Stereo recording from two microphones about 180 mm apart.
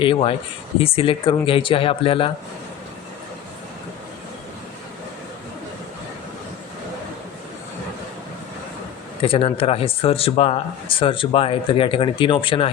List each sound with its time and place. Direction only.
0.0 s speech: 30° left (ahead or behind)
9.2 s speech: 30° left (ahead or behind)